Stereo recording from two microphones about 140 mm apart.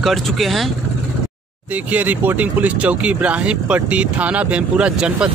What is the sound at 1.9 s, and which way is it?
Speech, 10° right (ahead or behind).